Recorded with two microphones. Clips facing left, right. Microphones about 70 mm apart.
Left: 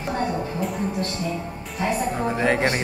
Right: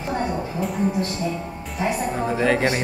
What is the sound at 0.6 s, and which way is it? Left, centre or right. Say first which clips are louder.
Music: right 2 dB; centre.